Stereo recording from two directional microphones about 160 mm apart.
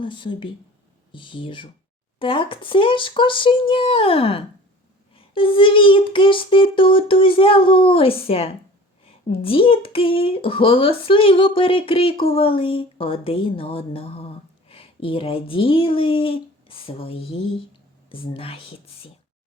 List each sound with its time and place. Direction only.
0.0 s speech: 30° left (ahead or behind)